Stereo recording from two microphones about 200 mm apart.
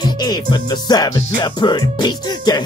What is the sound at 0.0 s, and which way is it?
Music, 20° left (ahead or behind).